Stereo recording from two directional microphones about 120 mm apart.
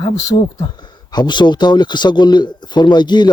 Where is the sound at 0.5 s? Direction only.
35° left (ahead or behind).